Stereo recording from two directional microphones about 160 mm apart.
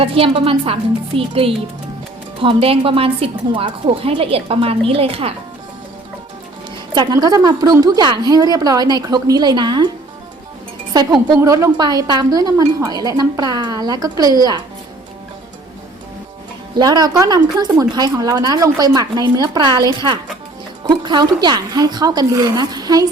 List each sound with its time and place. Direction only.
0.0 s a woman's voice: 35° right (ahead or behind)
6.9 s a woman's voice: 25° right (ahead or behind)
10.9 s a woman's voice: 25° right (ahead or behind)
16.7 s a woman's voice: 25° right (ahead or behind)